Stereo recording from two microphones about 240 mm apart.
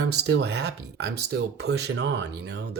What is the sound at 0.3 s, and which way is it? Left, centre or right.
Speech, right.